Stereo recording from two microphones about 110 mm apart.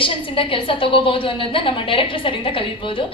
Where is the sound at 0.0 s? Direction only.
50° left (ahead or behind).